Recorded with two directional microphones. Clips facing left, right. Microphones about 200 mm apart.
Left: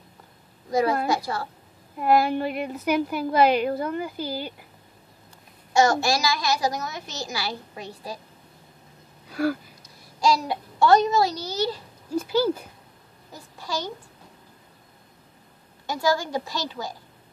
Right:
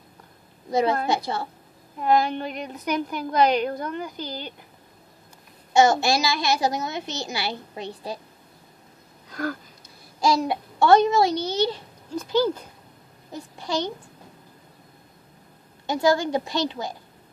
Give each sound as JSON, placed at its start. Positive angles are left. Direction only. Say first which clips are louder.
{"t": 0.7, "sound": "a child's voice", "louder": "even", "side_deg": -25}
{"t": 2.0, "sound": "a woman's voice", "louder": "left 1 dB", "side_deg": 5}
{"t": 5.8, "sound": "a child's voice", "louder": "right 2 dB", "side_deg": -25}
{"t": 9.3, "sound": "a sound", "louder": "left 5 dB", "side_deg": 10}
{"t": 10.2, "sound": "a child's voice", "louder": "right 1 dB", "side_deg": -25}
{"t": 12.2, "sound": "a woman's voice", "louder": "even", "side_deg": 10}
{"t": 13.3, "sound": "a child's voice", "louder": "right 4 dB", "side_deg": -20}
{"t": 15.9, "sound": "a child's voice", "louder": "right 3 dB", "side_deg": -20}